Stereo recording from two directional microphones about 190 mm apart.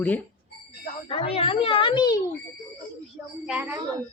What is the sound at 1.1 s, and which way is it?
A child's voice, 30° left (ahead or behind).